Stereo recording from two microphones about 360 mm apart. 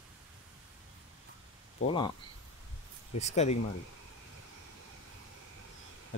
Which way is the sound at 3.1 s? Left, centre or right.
Centre.